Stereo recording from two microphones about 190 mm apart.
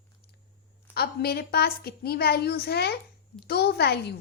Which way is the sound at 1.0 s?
55° left (ahead or behind).